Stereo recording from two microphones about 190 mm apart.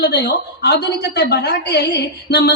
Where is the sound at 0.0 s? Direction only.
60° left (ahead or behind).